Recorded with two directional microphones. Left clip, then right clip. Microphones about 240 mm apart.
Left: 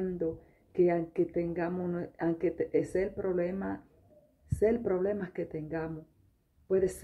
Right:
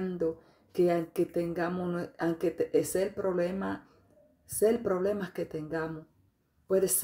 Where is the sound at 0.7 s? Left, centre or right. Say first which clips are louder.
Even; centre.